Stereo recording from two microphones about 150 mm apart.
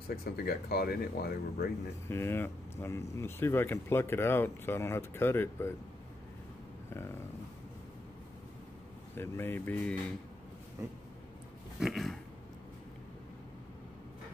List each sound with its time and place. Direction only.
0.1 s speech: 85° left
2.0 s speech: 15° left (ahead or behind)
9.1 s speech: 15° left (ahead or behind)
11.8 s a sound: centre (ahead or behind)